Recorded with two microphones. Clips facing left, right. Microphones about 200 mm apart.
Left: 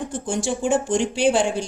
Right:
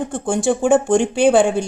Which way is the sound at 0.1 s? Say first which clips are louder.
Right 7 dB; 55° right (ahead or behind).